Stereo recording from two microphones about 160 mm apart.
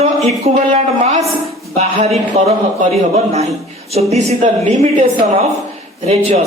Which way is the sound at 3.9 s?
40° right (ahead or behind).